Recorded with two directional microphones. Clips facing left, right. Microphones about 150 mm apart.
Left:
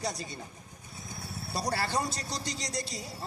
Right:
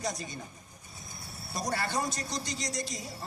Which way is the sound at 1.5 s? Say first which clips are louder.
Left 1 dB; 30° left (ahead or behind).